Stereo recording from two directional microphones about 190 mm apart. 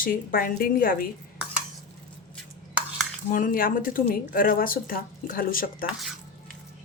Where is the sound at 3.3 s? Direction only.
45° left (ahead or behind).